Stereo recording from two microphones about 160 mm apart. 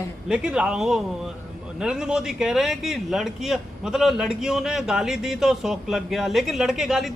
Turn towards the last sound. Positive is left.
turn(degrees=0)  # may be behind; listen again after turning